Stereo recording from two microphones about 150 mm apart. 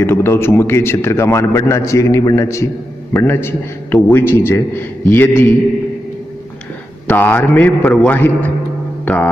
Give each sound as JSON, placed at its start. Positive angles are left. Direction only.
{"t": 0.0, "sound": "a man's voice", "side_deg": 15}
{"t": 7.1, "sound": "a man's voice", "side_deg": 10}
{"t": 9.0, "sound": "music", "side_deg": 10}